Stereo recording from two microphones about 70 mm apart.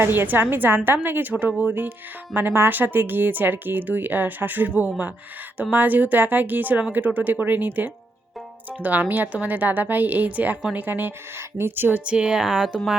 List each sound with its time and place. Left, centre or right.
0.0 s a woman's voice: right
12.0 s speech: centre